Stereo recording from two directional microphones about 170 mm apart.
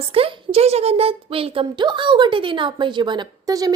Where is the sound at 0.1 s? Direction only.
35° right (ahead or behind).